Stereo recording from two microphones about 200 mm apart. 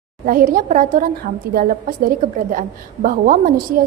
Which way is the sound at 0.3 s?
45° right (ahead or behind).